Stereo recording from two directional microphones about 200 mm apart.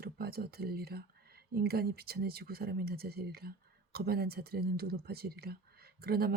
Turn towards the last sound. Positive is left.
turn(degrees=-50)  # may be behind; listen again after turning